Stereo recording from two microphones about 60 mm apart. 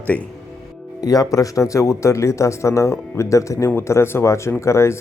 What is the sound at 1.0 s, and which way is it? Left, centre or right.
Speech, left.